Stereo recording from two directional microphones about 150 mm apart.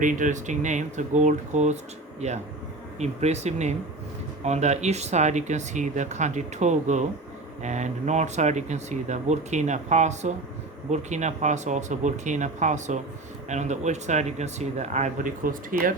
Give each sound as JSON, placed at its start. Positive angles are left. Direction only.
{"t": 0.0, "sound": "speech", "side_deg": -60}